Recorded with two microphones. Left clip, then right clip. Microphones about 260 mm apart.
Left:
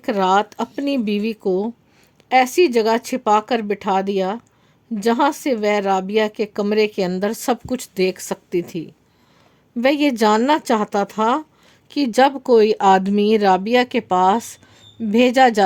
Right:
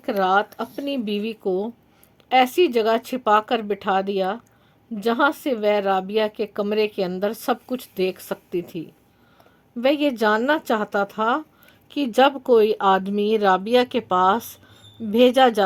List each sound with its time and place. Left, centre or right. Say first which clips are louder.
0.0 s a woman's voice: left 3 dB; left